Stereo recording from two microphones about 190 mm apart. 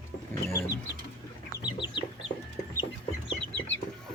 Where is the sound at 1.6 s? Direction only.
25° left (ahead or behind).